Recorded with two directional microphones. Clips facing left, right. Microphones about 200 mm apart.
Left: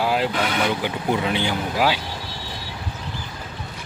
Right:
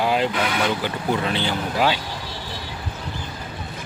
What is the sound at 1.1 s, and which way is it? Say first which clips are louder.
Speech: left 1 dB; 15° left (ahead or behind).